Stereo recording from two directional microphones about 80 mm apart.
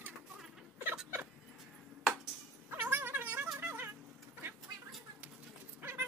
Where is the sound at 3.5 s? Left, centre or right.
Right.